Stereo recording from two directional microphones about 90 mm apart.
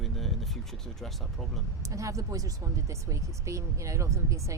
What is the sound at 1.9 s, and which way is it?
Speech, 35° right (ahead or behind).